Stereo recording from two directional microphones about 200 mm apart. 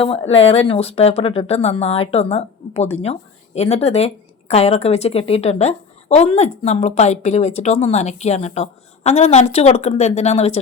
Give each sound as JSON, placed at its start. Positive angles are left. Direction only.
{"t": 0.0, "sound": "speech", "side_deg": 30}